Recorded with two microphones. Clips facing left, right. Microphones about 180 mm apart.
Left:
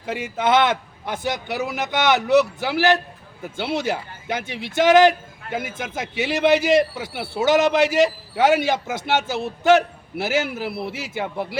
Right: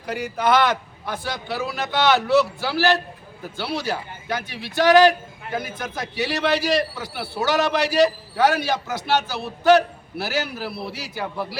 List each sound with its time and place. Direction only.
0.0 s a man's voice: 25° left (ahead or behind)